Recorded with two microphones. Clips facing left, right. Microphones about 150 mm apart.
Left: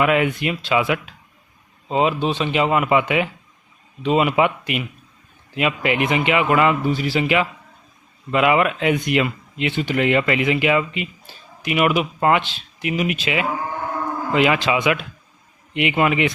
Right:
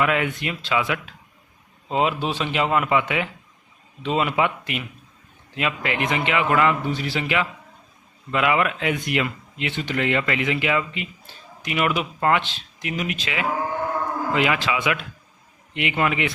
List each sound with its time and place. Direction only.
0.0 s speech: 15° left (ahead or behind)
1.9 s a man's voice: centre (ahead or behind); by 16.3 s 20° left (ahead or behind)